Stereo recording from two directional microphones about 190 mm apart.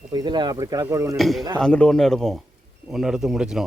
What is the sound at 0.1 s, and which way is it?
Speech, 20° right (ahead or behind).